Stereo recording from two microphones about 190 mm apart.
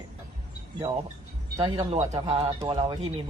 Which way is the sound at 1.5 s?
30° right (ahead or behind).